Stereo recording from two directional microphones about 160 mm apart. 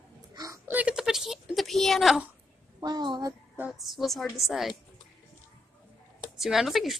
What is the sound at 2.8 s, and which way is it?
Speech, 25° right (ahead or behind).